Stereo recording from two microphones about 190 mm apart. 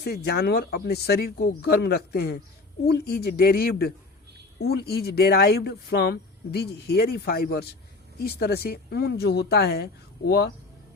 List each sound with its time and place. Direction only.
0.0 s speech: 55° left (ahead or behind)